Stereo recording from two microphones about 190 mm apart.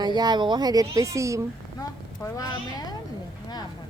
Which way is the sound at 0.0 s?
20° right (ahead or behind).